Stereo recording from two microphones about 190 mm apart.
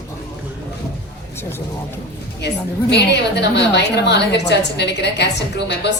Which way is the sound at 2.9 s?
65° left (ahead or behind).